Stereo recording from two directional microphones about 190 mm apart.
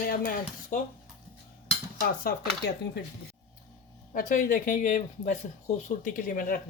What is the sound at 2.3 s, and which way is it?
Speech, 55° left (ahead or behind).